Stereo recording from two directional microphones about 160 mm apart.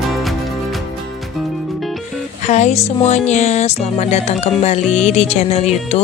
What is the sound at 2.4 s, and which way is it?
Speech, 45° left (ahead or behind).